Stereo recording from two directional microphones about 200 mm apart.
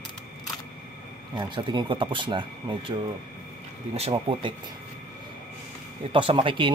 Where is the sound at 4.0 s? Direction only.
25° right (ahead or behind).